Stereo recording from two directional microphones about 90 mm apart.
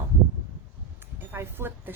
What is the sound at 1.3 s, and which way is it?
Speech, 25° right (ahead or behind).